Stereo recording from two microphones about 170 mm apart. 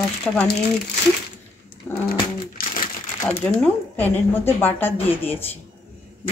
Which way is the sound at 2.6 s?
60° left (ahead or behind).